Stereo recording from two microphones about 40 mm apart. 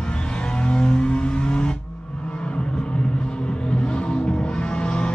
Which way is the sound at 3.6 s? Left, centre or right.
Left.